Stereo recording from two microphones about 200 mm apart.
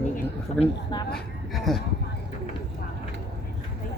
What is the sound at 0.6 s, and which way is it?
Speech, 20° left (ahead or behind).